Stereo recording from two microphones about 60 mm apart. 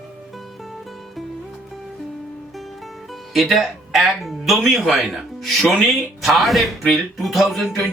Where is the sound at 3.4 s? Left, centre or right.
Centre.